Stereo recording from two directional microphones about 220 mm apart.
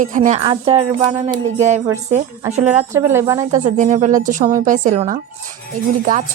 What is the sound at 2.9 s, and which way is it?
Speech, 10° right (ahead or behind).